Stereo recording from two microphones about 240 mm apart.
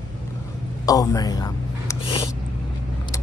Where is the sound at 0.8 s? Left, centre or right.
Centre.